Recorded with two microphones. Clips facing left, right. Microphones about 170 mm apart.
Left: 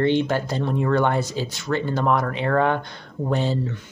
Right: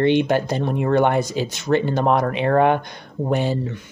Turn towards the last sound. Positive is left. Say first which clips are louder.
# right 2 dB
turn(degrees=-15)  # may be behind; listen again after turning